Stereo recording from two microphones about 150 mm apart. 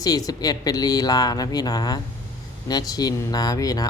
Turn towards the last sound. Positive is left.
turn(degrees=25)  # may be behind; listen again after turning